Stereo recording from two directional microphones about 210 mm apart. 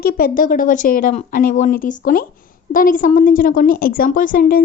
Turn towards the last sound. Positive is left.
turn(degrees=40)  # may be behind; listen again after turning